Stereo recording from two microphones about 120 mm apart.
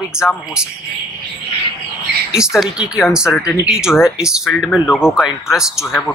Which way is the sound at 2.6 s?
5° right (ahead or behind).